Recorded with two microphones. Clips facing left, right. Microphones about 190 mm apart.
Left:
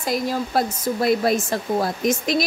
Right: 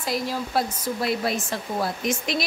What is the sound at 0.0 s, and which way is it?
Speech, 45° left (ahead or behind).